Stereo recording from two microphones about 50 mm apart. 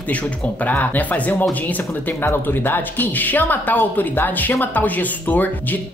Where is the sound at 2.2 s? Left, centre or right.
Left.